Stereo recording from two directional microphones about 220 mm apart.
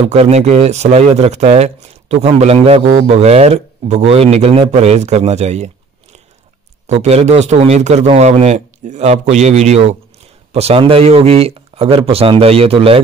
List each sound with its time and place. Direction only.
0.1 s speech: 30° right (ahead or behind)
6.9 s a man's voice: 30° right (ahead or behind)